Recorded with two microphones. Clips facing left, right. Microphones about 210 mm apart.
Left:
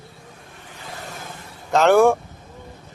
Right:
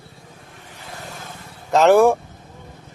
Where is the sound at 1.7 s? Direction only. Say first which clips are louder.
Right 1 dB; centre (ahead or behind).